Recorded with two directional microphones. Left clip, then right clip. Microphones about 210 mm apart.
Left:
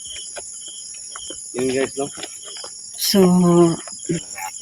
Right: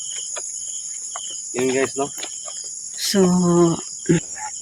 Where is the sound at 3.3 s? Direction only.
15° left (ahead or behind).